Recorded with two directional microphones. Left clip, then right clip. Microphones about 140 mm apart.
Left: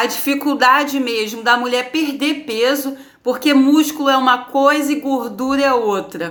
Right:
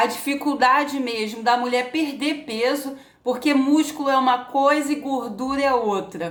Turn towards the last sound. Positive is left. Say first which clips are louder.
# left 5 dB
turn(degrees=-5)  # may be behind; listen again after turning